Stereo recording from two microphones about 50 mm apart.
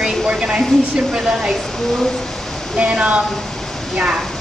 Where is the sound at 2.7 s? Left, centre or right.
Right.